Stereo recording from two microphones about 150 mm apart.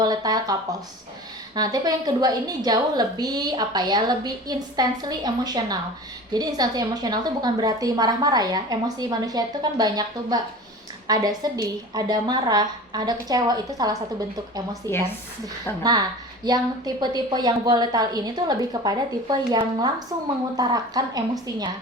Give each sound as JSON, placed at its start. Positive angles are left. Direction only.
{"t": 0.0, "sound": "a sound", "side_deg": -25}
{"t": 1.5, "sound": "a woman's voice", "side_deg": -25}
{"t": 14.9, "sound": "speech", "side_deg": 15}
{"t": 15.8, "sound": "a woman's voice", "side_deg": -25}